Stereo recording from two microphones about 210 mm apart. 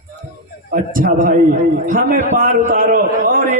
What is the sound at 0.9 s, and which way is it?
A man's voice, 40° right (ahead or behind).